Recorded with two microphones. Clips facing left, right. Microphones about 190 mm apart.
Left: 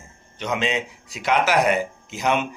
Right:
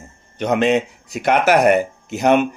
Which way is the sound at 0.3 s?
60° right (ahead or behind).